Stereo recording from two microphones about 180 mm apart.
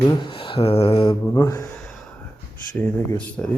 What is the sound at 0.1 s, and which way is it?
Speech, 25° left (ahead or behind).